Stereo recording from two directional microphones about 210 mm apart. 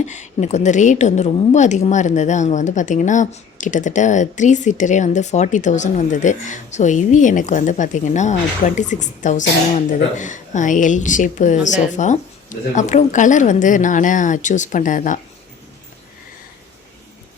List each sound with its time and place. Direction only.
0.0 s a woman's voice: 35° left (ahead or behind)